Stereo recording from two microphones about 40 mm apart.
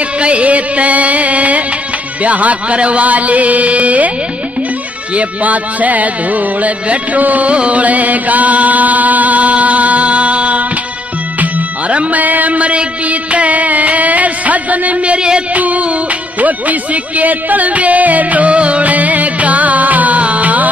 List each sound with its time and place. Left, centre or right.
0.2 s music: right
2.2 s chant: right
5.1 s chant: right
11.3 s music: right
15.5 s music: right